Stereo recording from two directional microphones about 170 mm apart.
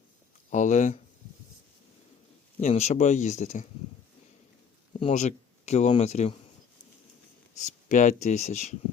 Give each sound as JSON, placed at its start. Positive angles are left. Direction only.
{"t": 0.5, "sound": "speech", "side_deg": 45}
{"t": 2.6, "sound": "speech", "side_deg": 45}
{"t": 4.9, "sound": "speech", "side_deg": 35}
{"t": 7.5, "sound": "speech", "side_deg": 45}